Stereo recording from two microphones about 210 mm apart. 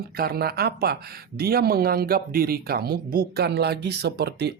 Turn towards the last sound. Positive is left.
turn(degrees=-50)  # may be behind; listen again after turning